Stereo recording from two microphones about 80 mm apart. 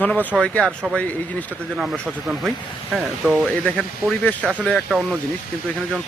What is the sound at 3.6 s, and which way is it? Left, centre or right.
Speech, centre.